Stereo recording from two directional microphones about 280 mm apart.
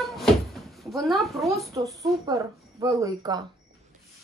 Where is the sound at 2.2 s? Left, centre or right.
Centre.